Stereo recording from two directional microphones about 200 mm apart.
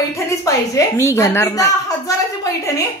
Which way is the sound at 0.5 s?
15° left (ahead or behind).